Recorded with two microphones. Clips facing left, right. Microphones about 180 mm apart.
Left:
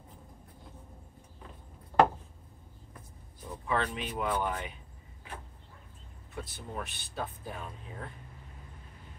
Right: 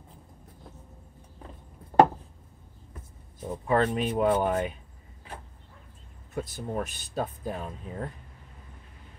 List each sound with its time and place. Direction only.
1.9 s a sound: 45° right (ahead or behind)
3.6 s speech: 45° right (ahead or behind)
6.3 s speech: 45° right (ahead or behind)